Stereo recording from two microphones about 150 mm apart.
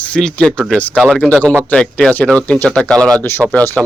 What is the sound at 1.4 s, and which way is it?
Speech, 15° right (ahead or behind).